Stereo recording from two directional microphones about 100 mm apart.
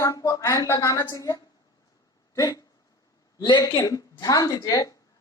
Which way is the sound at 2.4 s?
35° left (ahead or behind).